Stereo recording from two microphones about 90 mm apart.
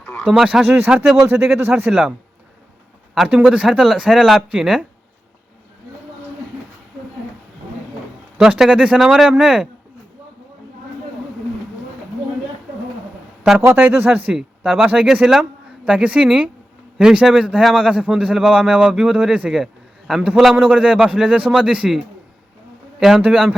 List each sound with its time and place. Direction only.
0.0 s a sound: 15° left (ahead or behind)
0.3 s a man's voice: 5° right (ahead or behind)
1.3 s speech: 25° right (ahead or behind)
1.9 s speech: 5° right (ahead or behind)
3.2 s speech: 5° right (ahead or behind)
8.4 s a man's voice: 5° right (ahead or behind)
13.8 s speech: 20° right (ahead or behind)
14.3 s a man's voice: 5° right (ahead or behind)
20.6 s a man's voice: 15° right (ahead or behind)
23.0 s speech: 5° right (ahead or behind)